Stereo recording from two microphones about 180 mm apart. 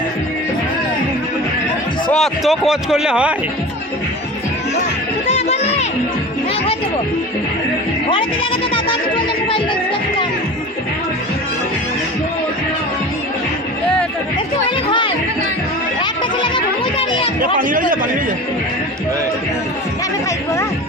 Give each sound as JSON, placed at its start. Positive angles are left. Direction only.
{"t": 2.0, "sound": "speech", "side_deg": 0}
{"t": 5.3, "sound": "music", "side_deg": 40}
{"t": 8.7, "sound": "music", "side_deg": 30}
{"t": 14.8, "sound": "music", "side_deg": 25}
{"t": 16.0, "sound": "a sound", "side_deg": 25}
{"t": 17.4, "sound": "a man's voice", "side_deg": -50}